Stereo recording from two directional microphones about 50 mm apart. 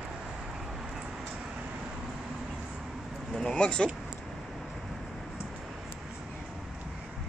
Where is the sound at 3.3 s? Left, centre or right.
Centre.